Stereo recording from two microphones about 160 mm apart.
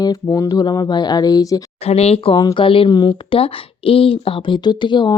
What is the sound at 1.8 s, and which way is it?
A woman's voice, 40° left (ahead or behind).